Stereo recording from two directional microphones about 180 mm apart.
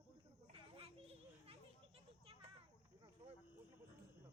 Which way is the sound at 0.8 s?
30° right (ahead or behind).